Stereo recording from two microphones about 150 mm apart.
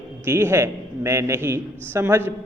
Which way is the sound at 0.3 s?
15° right (ahead or behind).